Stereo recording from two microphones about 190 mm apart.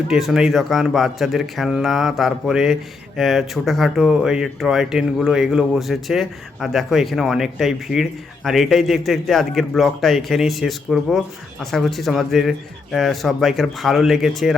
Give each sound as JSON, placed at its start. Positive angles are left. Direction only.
{"t": 0.1, "sound": "speech", "side_deg": 0}